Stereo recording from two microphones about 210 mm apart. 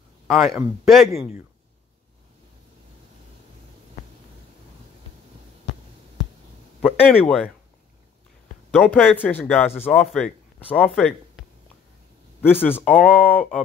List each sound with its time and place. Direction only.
0.3 s speech: centre (ahead or behind)
6.8 s speech: 5° left (ahead or behind)
8.7 s speech: centre (ahead or behind)
11.0 s a sound: centre (ahead or behind)
12.6 s speech: 10° left (ahead or behind)